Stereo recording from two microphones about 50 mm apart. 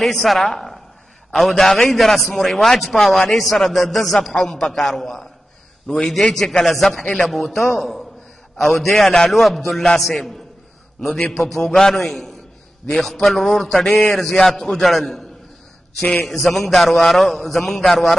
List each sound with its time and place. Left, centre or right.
0.0 s a woman's voice: centre
5.9 s a man's voice: centre
16.3 s a man's voice: centre